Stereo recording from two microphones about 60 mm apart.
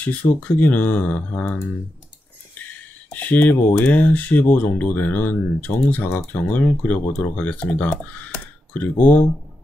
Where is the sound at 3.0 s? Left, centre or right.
Left.